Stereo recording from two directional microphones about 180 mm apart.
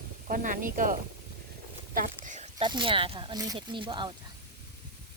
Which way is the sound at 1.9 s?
45° right (ahead or behind).